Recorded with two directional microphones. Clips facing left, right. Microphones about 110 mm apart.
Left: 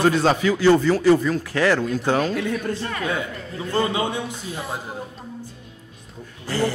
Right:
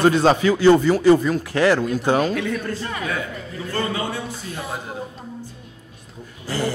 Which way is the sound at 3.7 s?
20° left (ahead or behind).